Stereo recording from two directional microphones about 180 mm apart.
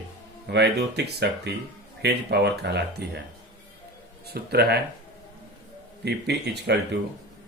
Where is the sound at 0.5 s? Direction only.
65° right (ahead or behind).